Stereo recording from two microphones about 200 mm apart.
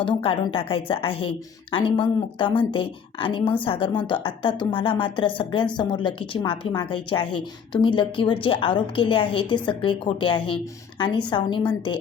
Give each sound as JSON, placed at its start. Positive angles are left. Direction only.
{"t": 0.0, "sound": "a woman's voice", "side_deg": 25}